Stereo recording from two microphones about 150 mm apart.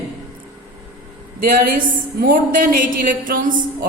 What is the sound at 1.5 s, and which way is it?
A woman's voice, 65° right (ahead or behind).